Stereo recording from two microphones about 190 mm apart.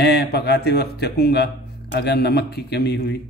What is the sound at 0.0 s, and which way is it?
A man's voice, 60° left (ahead or behind).